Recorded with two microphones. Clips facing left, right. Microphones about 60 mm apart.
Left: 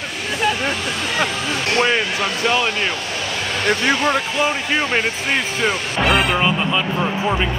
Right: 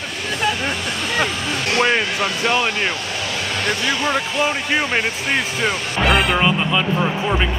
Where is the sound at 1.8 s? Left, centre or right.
Centre.